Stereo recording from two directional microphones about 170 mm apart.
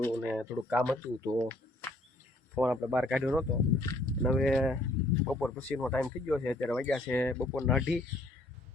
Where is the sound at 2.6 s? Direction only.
5° right (ahead or behind).